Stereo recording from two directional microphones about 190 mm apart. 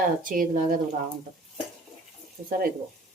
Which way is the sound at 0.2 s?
45° right (ahead or behind).